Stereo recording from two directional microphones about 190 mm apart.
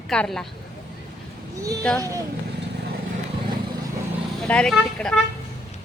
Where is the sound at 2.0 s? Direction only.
15° right (ahead or behind).